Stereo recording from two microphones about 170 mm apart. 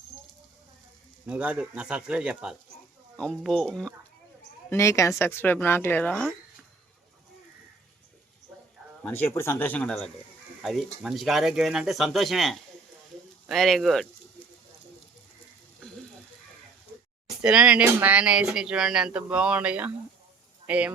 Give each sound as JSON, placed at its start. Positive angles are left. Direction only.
{"t": 1.3, "sound": "speech", "side_deg": -5}
{"t": 4.7, "sound": "speech", "side_deg": 15}
{"t": 9.0, "sound": "speech", "side_deg": 10}
{"t": 17.2, "sound": "speech", "side_deg": -5}